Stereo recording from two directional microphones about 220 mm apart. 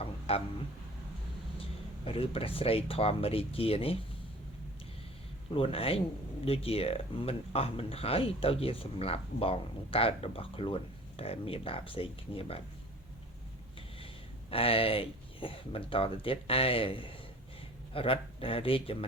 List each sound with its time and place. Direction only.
0.0 s a sound: 25° left (ahead or behind)
2.0 s speech: 25° left (ahead or behind)
5.5 s speech: 25° left (ahead or behind)
14.5 s speech: 25° left (ahead or behind)